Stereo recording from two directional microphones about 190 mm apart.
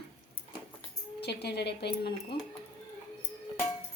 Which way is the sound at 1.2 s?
60° left (ahead or behind).